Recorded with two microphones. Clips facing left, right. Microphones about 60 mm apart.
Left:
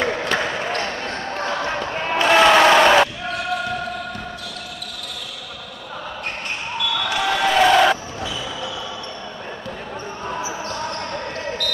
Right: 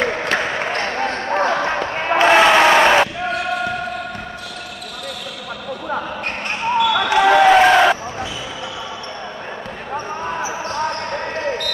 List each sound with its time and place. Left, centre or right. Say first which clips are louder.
0.0 s a sound: right 2 dB; right
0.6 s basketball bounce: right 4 dB; right
2.4 s crowd: right 1 dB; centre
3.2 s basketball bounce: right 4 dB; right
6.9 s basketball bounce: right 7 dB; right; by 8.3 s centre
10.2 s basketball bounce: right 3 dB; right